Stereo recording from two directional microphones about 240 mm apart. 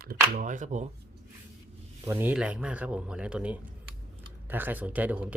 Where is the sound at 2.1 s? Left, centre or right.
Centre.